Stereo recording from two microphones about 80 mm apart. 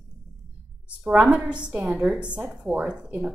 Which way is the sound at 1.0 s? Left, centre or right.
Centre.